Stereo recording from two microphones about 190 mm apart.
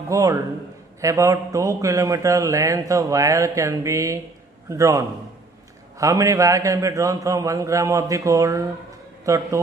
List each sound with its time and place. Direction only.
0.1 s speech: 15° right (ahead or behind)